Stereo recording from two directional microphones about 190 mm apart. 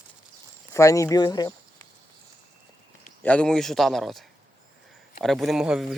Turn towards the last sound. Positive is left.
turn(degrees=-5)  # may be behind; listen again after turning